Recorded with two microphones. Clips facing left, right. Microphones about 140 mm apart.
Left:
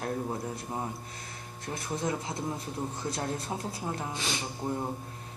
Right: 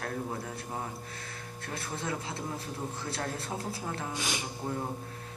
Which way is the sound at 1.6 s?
15° left (ahead or behind).